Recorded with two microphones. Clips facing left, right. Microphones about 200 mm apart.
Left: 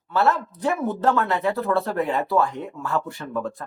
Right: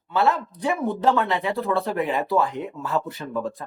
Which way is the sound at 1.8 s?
15° right (ahead or behind).